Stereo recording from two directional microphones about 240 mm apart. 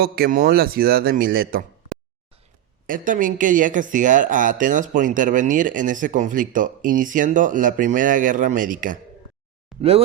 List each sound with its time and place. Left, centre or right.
0.0 s speech: right
2.8 s speech: right
9.7 s a sound: centre